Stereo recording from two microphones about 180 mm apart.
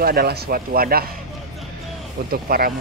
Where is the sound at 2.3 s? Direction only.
55° right (ahead or behind).